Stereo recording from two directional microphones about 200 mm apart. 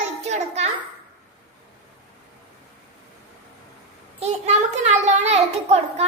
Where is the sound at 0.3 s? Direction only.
35° right (ahead or behind).